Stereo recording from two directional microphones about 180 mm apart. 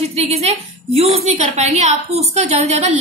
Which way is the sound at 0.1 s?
35° right (ahead or behind).